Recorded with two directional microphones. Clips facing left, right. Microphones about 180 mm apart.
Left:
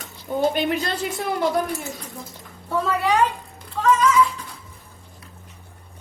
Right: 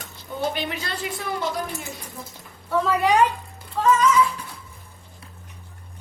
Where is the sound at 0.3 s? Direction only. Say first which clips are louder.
Left 6 dB; 45° left (ahead or behind).